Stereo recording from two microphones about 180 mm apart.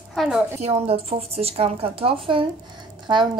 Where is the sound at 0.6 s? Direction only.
35° right (ahead or behind).